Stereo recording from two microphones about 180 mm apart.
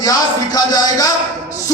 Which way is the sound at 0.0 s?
20° left (ahead or behind).